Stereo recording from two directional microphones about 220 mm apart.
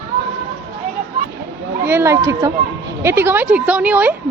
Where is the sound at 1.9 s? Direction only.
10° right (ahead or behind).